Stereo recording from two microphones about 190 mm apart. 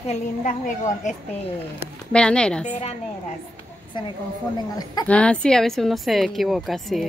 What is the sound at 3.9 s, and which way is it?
Speech, 25° left (ahead or behind).